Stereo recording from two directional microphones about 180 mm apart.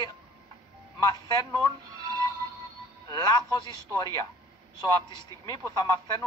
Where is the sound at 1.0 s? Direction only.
20° left (ahead or behind).